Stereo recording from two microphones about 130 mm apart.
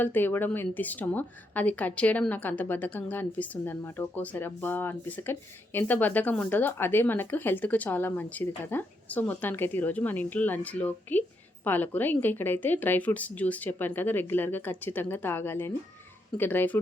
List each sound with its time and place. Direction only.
0.0 s a woman's voice: 15° left (ahead or behind)